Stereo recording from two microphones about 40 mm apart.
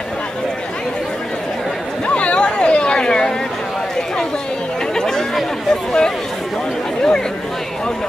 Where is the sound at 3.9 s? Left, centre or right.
Left.